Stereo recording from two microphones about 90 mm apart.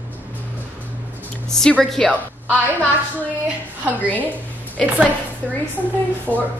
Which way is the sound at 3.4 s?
15° right (ahead or behind).